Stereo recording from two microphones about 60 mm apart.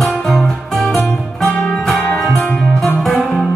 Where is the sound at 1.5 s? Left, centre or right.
Left.